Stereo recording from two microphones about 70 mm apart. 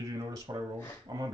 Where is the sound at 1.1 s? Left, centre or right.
Right.